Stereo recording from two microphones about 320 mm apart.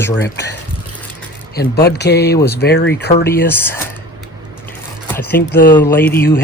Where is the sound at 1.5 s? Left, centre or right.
Left.